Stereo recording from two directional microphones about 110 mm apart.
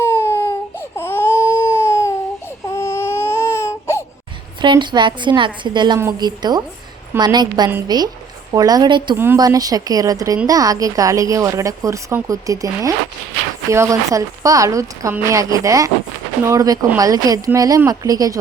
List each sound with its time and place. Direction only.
0.0 s baby cry: 25° left (ahead or behind)
4.6 s a woman's voice: 45° right (ahead or behind)
9.1 s speech: 20° right (ahead or behind)
9.4 s a woman's voice: 35° right (ahead or behind)